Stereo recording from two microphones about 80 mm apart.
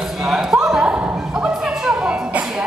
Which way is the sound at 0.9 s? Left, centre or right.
Centre.